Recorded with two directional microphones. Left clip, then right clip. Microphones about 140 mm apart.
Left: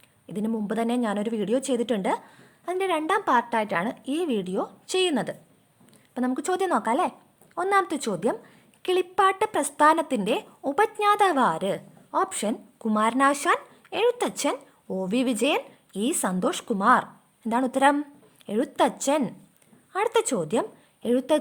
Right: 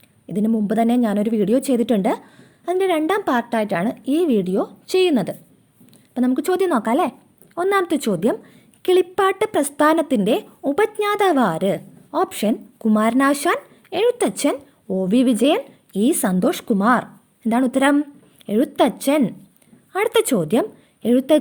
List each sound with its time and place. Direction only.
0.3 s a woman's voice: 25° right (ahead or behind)